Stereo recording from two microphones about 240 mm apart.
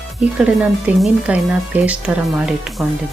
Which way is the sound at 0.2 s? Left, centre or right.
Centre.